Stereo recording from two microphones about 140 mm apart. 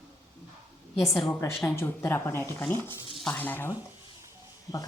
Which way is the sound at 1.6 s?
20° left (ahead or behind).